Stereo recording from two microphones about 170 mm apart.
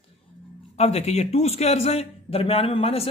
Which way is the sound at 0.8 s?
40° left (ahead or behind).